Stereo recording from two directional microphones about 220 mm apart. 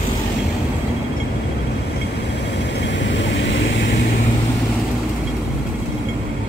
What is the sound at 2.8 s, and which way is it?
Vehicle, 55° left (ahead or behind).